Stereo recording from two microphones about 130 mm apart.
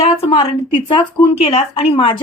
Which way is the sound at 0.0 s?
50° left (ahead or behind).